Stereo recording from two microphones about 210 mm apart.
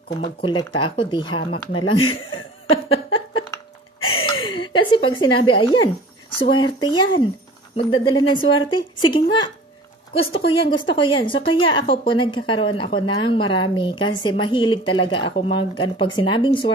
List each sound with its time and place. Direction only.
0.2 s speech: 25° left (ahead or behind)
4.3 s chuckle: 25° left (ahead or behind)
4.7 s speech: 25° left (ahead or behind)